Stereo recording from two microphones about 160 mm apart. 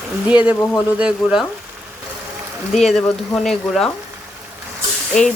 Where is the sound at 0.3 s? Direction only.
10° right (ahead or behind).